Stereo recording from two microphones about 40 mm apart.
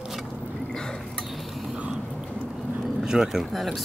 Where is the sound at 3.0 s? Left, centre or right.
Centre.